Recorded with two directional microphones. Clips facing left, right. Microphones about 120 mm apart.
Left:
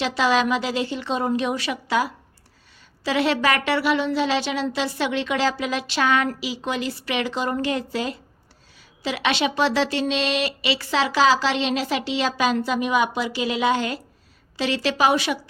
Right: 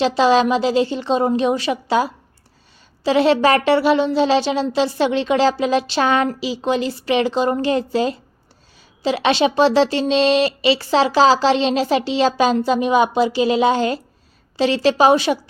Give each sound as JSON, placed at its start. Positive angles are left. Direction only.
{"t": 0.0, "sound": "speech", "side_deg": -30}